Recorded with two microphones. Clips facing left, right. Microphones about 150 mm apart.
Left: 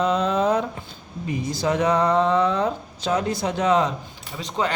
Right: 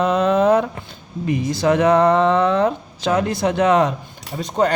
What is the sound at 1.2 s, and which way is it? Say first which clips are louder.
Speech: right 6 dB; 75° right (ahead or behind).